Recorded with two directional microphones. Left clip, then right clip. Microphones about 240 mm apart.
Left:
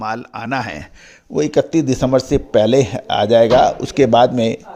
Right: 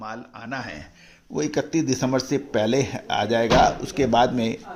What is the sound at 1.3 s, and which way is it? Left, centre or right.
Speech, left.